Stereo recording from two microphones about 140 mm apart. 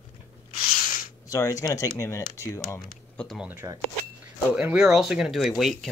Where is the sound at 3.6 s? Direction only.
20° right (ahead or behind).